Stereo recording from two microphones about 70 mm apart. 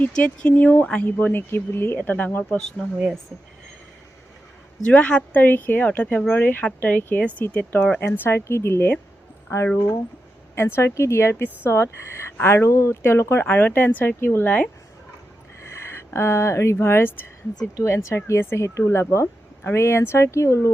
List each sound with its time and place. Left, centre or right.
0.0 s speech: centre
2.6 s speech: centre
4.9 s speech: centre
15.7 s a sound: left
16.7 s speech: left
17.7 s speech: left